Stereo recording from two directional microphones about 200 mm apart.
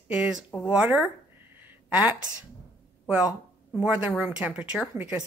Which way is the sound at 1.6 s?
10° right (ahead or behind).